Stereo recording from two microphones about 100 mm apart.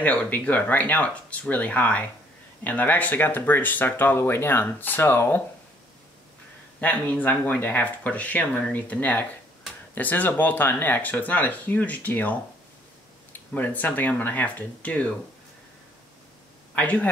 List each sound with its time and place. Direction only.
0.0 s speech: 15° left (ahead or behind)
6.8 s speech: 15° left (ahead or behind)
16.7 s speech: 15° left (ahead or behind)